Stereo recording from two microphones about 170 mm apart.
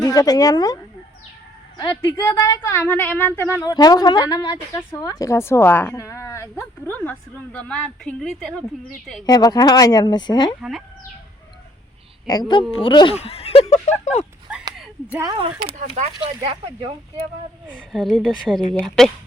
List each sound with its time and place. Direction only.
0.0 s speech: 20° left (ahead or behind)
1.8 s a woman's voice: 25° left (ahead or behind); by 8.5 s centre (ahead or behind)
9.2 s speech: 25° left (ahead or behind)
10.6 s a woman's voice: centre (ahead or behind)
12.3 s speech: 25° left (ahead or behind)
14.5 s a sound: 5° right (ahead or behind)
15.2 s speech: 30° right (ahead or behind)
16.0 s speech: 40° right (ahead or behind)
17.7 s a woman's voice: 5° right (ahead or behind)